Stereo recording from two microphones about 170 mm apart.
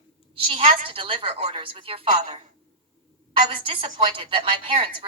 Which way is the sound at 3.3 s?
30° right (ahead or behind).